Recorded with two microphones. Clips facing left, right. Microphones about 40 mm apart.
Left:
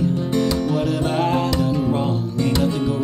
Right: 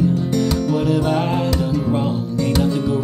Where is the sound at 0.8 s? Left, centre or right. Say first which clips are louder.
Right 2 dB; centre.